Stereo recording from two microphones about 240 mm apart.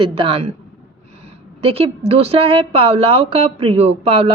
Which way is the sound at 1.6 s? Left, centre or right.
Right.